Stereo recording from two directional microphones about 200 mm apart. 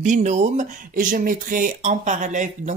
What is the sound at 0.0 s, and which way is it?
Speech, 35° right (ahead or behind).